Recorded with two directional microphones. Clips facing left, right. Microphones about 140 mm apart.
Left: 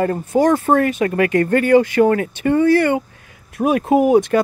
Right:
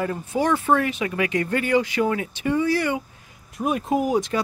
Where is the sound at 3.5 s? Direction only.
70° left (ahead or behind).